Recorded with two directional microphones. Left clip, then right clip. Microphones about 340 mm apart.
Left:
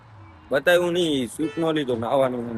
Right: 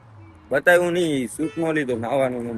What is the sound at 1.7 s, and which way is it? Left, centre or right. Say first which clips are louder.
Speech: even; centre.